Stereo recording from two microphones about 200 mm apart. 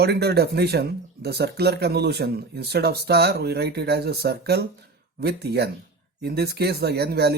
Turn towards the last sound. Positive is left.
turn(degrees=-55)  # may be behind; listen again after turning